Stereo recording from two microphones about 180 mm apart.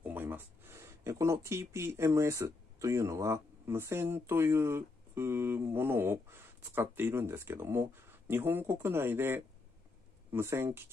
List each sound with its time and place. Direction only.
0.0 s speech: 10° right (ahead or behind)